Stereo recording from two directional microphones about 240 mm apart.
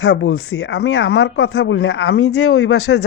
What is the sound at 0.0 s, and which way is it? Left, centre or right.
Speech, left.